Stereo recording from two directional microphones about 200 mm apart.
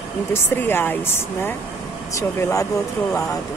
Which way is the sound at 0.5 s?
10° left (ahead or behind).